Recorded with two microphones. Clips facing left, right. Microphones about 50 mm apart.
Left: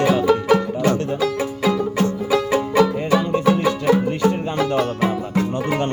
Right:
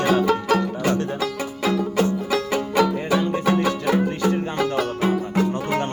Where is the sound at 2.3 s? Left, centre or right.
Left.